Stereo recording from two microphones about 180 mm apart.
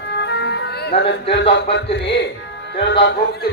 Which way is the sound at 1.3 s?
75° left (ahead or behind).